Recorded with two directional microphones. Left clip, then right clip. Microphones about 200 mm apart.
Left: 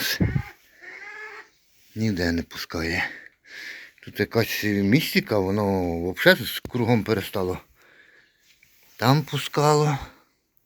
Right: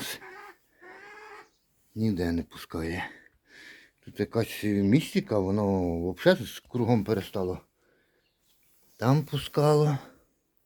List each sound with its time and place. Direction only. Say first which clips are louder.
2.0 s speech: left 4 dB; centre (ahead or behind)
9.0 s speech: left 6 dB; centre (ahead or behind)